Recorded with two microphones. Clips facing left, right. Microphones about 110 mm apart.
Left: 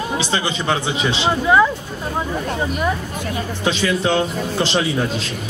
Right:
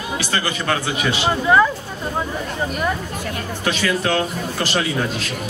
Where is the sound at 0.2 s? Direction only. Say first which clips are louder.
Left 2 dB; 20° left (ahead or behind).